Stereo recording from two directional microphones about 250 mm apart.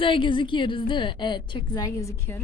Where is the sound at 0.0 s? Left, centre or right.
Centre.